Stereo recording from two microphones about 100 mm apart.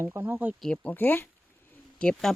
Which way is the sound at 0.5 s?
10° left (ahead or behind).